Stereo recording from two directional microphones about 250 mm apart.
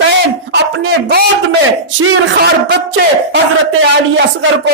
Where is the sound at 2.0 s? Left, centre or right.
Right.